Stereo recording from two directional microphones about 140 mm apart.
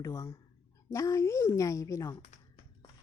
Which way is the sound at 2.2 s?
50° left (ahead or behind).